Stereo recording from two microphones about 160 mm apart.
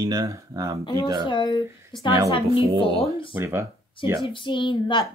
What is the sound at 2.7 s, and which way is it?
Speech, 30° right (ahead or behind).